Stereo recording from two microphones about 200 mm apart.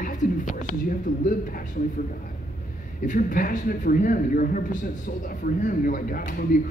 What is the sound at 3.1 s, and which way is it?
Speech, 40° left (ahead or behind).